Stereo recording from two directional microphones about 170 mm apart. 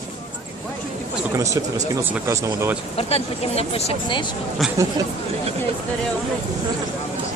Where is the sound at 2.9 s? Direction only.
35° left (ahead or behind).